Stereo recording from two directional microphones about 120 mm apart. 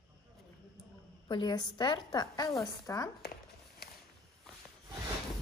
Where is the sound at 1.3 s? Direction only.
40° left (ahead or behind).